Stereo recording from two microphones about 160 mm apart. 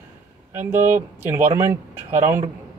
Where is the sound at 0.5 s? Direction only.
15° right (ahead or behind).